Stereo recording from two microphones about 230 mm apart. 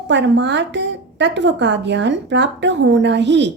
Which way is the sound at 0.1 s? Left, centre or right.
Right.